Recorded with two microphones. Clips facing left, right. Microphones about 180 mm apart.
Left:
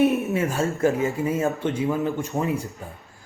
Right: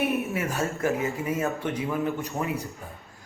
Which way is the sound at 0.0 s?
25° left (ahead or behind).